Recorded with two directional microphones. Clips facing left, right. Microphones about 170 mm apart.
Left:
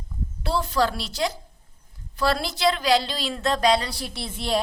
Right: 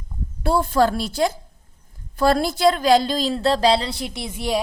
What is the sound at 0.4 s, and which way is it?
A woman's voice, 50° right (ahead or behind).